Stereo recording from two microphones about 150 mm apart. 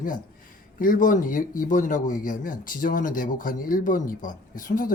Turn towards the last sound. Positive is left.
turn(degrees=65)  # may be behind; listen again after turning